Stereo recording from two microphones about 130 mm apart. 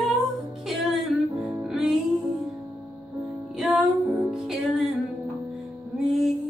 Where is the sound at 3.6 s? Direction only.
Centre (ahead or behind).